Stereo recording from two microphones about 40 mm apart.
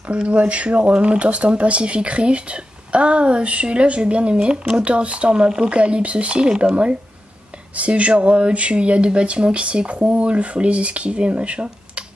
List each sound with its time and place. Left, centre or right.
0.1 s speech: right